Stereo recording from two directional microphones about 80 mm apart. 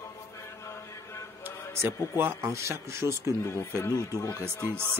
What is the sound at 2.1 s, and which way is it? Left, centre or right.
Speech, right.